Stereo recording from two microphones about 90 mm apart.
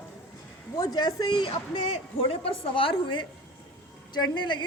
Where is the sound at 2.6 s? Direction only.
80° left; by 4.7 s 60° left (ahead or behind).